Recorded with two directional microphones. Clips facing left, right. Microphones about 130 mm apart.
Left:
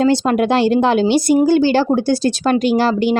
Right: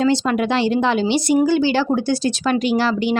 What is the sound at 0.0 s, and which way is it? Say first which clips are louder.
A woman's voice: left 3 dB; 45° left (ahead or behind).